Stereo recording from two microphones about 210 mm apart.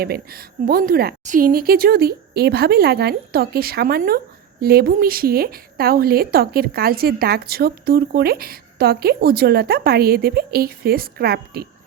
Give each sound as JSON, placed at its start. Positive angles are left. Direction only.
{"t": 0.0, "sound": "a woman's voice", "side_deg": -45}